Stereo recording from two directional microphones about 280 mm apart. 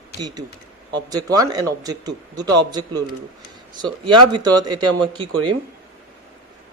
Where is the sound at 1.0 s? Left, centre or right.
Centre.